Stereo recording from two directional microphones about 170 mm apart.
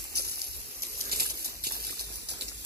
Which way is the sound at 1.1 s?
65° right (ahead or behind).